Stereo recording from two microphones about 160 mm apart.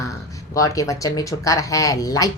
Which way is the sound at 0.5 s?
20° left (ahead or behind).